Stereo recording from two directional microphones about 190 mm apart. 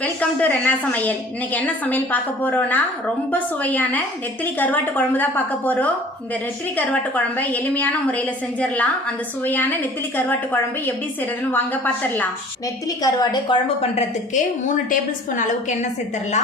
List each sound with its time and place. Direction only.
0.0 s a woman's voice: 5° left (ahead or behind)
13.9 s a woman's voice: 40° left (ahead or behind)